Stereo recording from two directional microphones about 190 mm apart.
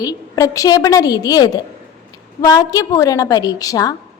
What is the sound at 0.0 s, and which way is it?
A woman's voice, 20° left (ahead or behind).